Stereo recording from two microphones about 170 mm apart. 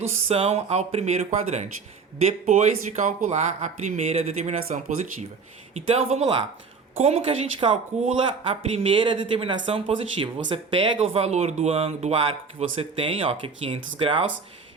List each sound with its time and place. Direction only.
0.3 s speech: 35° right (ahead or behind)
5.9 s speech: 35° right (ahead or behind)